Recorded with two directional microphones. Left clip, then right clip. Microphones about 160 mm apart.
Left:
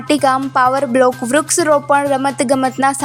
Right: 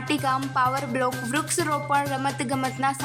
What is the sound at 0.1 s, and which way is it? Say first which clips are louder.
Speech: left 11 dB; 50° left (ahead or behind).